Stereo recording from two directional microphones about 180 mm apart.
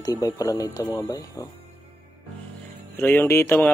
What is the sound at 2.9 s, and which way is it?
Speech, 10° left (ahead or behind).